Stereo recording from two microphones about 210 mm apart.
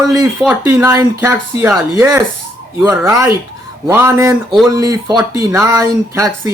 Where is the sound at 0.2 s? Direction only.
15° right (ahead or behind).